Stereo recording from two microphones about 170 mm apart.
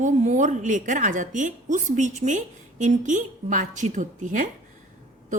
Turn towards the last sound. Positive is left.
turn(degrees=-50)  # may be behind; listen again after turning